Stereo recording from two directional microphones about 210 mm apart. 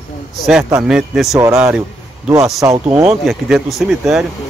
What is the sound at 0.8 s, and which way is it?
A man's voice, 5° right (ahead or behind).